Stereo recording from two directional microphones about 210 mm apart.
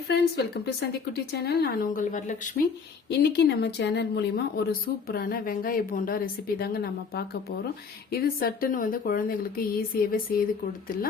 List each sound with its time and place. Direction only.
0.1 s speech: 50° left (ahead or behind)
3.1 s speech: 50° left (ahead or behind)